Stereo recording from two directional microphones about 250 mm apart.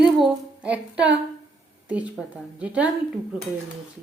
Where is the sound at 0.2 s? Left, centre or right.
Centre.